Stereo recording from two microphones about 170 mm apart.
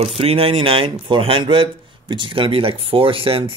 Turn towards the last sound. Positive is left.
turn(degrees=-35)  # may be behind; listen again after turning